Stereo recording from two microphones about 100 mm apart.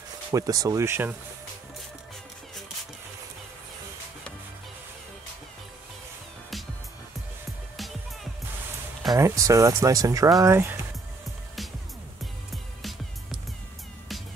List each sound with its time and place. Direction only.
0.3 s speech: 35° right (ahead or behind)
7.7 s music: centre (ahead or behind)
9.2 s speech: 30° right (ahead or behind)